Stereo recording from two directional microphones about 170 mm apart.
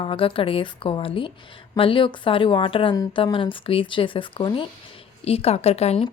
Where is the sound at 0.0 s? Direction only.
30° left (ahead or behind).